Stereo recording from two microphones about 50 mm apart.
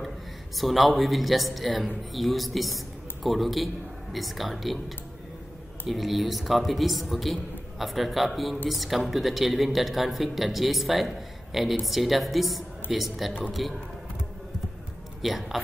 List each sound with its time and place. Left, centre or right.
0.6 s a woman's voice: centre
5.9 s a woman's voice: centre
15.2 s a woman's voice: centre